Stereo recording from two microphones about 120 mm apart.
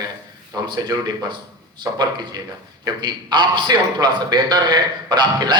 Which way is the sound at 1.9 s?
25° right (ahead or behind).